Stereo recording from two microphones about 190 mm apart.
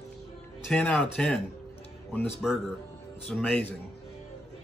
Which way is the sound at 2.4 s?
Centre (ahead or behind).